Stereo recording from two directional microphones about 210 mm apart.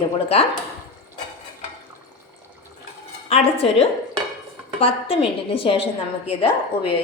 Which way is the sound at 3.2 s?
30° left (ahead or behind).